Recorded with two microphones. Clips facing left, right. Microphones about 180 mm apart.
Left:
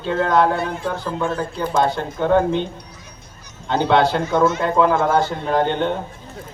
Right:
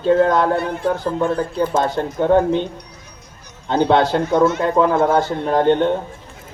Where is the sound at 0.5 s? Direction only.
60° right (ahead or behind).